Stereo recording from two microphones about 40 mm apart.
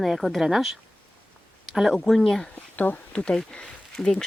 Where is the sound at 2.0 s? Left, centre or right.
Centre.